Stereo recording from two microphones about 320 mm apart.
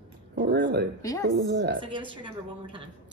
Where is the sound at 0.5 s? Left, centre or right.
Right.